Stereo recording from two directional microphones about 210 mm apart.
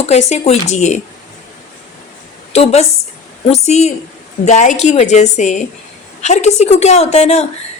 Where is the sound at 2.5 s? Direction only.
30° left (ahead or behind).